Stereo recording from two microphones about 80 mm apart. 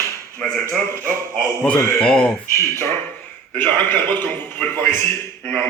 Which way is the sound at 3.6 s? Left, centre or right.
Left.